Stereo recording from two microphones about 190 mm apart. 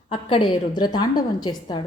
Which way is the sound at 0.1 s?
25° left (ahead or behind).